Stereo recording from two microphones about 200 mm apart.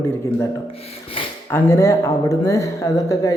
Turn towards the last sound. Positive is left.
turn(degrees=15)  # may be behind; listen again after turning